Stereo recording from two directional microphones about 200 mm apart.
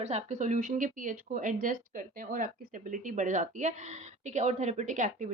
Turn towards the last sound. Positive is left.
turn(degrees=-40)  # may be behind; listen again after turning